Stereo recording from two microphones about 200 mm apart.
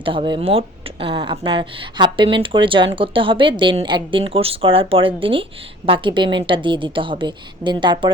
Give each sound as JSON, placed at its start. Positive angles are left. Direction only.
{"t": 0.0, "sound": "speech", "side_deg": -25}